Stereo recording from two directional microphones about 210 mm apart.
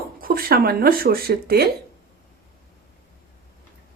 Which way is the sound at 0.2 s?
45° right (ahead or behind).